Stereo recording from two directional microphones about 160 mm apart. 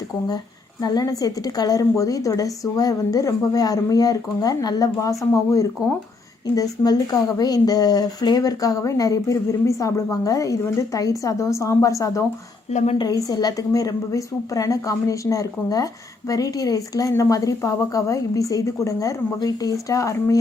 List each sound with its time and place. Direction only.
0.8 s speech: 25° left (ahead or behind)
12.7 s a woman's voice: 45° left (ahead or behind)
13.0 s speech: 20° left (ahead or behind)